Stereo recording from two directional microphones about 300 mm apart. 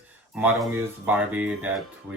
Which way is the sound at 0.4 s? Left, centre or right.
Centre.